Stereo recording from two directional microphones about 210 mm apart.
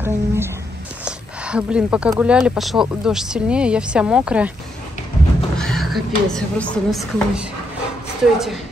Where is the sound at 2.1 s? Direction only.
5° right (ahead or behind).